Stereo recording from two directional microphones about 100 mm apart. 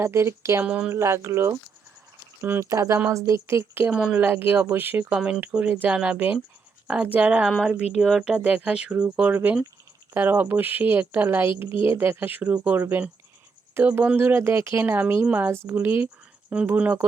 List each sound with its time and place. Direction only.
0.0 s speech: 25° right (ahead or behind)
0.6 s speech: 10° right (ahead or behind)
0.9 s speech: 25° right (ahead or behind)
3.9 s speech: 5° right (ahead or behind)
4.2 s speech: 20° right (ahead or behind)
8.0 s speech: centre (ahead or behind)
8.4 s speech: 15° right (ahead or behind)